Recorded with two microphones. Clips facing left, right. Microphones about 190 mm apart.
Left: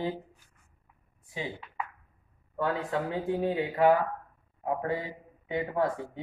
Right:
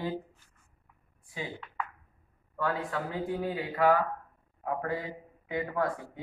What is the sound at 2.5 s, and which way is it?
Speech, 20° left (ahead or behind).